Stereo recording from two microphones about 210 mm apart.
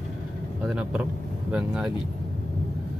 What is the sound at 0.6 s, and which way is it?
Speech, 5° right (ahead or behind).